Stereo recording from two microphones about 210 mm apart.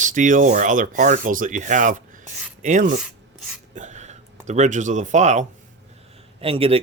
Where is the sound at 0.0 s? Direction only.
35° right (ahead or behind).